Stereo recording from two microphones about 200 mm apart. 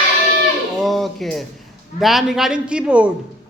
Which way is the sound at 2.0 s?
Centre (ahead or behind).